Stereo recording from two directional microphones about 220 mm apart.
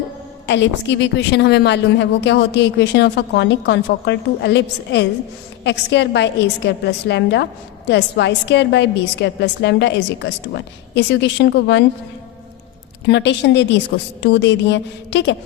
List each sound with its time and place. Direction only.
0.4 s a woman's voice: 55° left (ahead or behind)
13.1 s a woman's voice: 50° left (ahead or behind)